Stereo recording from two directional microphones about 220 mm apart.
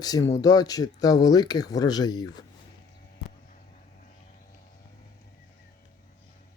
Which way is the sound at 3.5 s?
35° left (ahead or behind).